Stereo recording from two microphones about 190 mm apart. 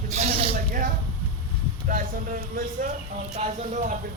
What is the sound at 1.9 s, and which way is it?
Speech, 45° right (ahead or behind).